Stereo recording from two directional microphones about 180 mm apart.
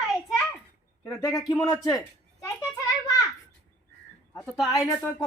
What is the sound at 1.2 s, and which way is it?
Speech, 20° left (ahead or behind).